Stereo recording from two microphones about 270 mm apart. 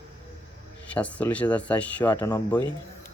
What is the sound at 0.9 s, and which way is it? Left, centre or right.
Speech, centre.